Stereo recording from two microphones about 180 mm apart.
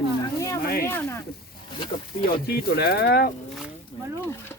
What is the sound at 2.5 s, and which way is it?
Speech, 60° left (ahead or behind).